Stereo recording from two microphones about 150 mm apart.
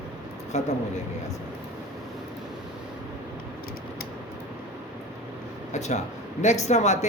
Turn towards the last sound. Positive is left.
turn(degrees=50)  # may be behind; listen again after turning